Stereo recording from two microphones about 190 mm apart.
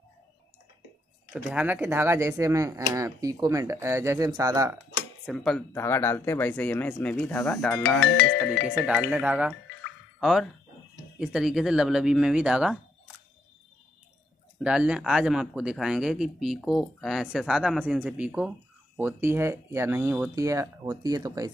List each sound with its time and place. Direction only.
1.3 s speech: 10° right (ahead or behind)
5.2 s speech: centre (ahead or behind)
5.8 s speech: 15° left (ahead or behind)
8.2 s speech: 75° left (ahead or behind)
8.6 s speech: 5° right (ahead or behind)
11.1 s speech: centre (ahead or behind)
14.6 s speech: 5° right (ahead or behind)